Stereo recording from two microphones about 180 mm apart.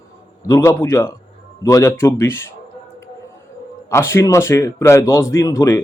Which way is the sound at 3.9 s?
15° left (ahead or behind).